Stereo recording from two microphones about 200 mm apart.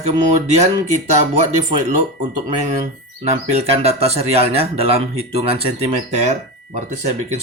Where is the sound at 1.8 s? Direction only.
35° right (ahead or behind).